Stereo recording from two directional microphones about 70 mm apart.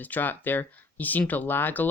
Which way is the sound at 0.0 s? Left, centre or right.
Left.